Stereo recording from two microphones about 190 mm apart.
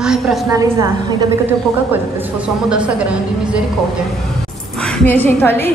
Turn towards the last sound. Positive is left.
turn(degrees=10)  # may be behind; listen again after turning